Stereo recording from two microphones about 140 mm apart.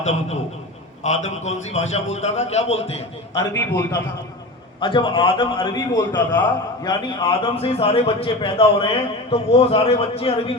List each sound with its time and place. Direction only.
0.0 s a man's voice: 50° left (ahead or behind)
3.3 s a man's voice: 20° left (ahead or behind)
4.8 s a man's voice: 35° left (ahead or behind)